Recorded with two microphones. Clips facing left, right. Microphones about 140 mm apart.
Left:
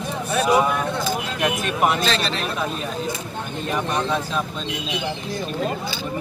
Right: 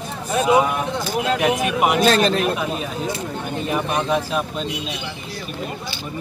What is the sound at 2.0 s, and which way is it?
Speech, 50° right (ahead or behind).